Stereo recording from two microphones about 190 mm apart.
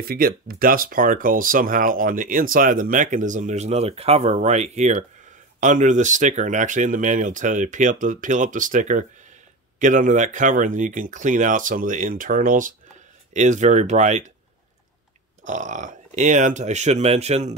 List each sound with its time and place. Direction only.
0.0 s speech: 50° right (ahead or behind); by 14.3 s 35° right (ahead or behind)
15.4 s speech: 40° right (ahead or behind)